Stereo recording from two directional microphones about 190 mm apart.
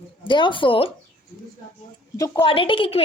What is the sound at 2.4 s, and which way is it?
Speech, 30° left (ahead or behind).